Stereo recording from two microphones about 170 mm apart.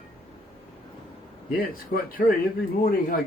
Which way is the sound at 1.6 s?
55° left (ahead or behind).